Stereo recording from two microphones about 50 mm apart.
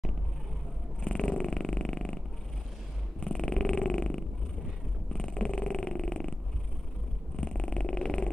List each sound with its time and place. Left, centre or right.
1.0 s dog: left
3.3 s purr: centre
7.3 s purr: centre